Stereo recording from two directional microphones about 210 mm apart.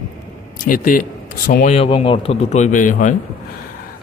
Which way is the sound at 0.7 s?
40° left (ahead or behind).